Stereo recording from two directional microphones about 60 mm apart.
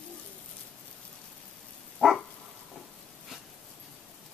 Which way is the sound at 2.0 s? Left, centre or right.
Centre.